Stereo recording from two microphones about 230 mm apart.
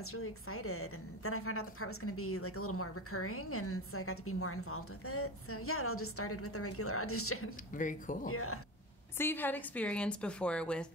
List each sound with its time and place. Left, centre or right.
0.0 s a woman's voice: left
7.7 s speech: left
8.3 s a woman's voice: left
9.2 s a woman's voice: centre